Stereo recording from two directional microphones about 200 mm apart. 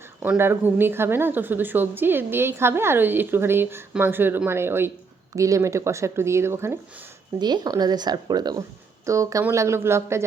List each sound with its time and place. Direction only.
0.2 s a woman's voice: 10° right (ahead or behind)